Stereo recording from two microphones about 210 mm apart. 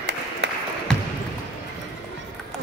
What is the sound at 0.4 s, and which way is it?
Applause, 60° right (ahead or behind).